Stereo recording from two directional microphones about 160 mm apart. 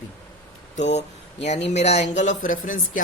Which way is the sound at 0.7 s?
45° left (ahead or behind).